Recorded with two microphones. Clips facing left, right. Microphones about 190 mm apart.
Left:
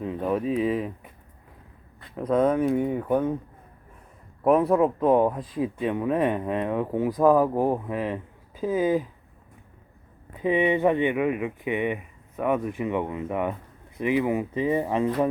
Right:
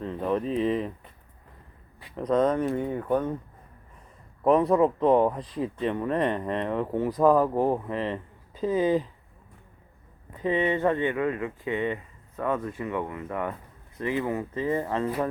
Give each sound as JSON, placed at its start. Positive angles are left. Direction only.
{"t": 0.0, "sound": "speech", "side_deg": 5}
{"t": 2.1, "sound": "speech", "side_deg": 5}
{"t": 4.4, "sound": "speech", "side_deg": 5}
{"t": 10.3, "sound": "speech", "side_deg": 15}